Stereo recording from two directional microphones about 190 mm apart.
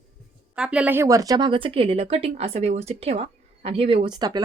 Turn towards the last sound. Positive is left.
turn(degrees=-20)  # may be behind; listen again after turning